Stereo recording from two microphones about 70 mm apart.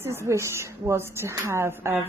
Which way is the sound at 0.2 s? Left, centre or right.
Right.